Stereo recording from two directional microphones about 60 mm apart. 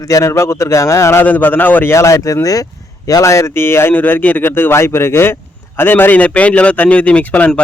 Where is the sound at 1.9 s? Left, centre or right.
Left.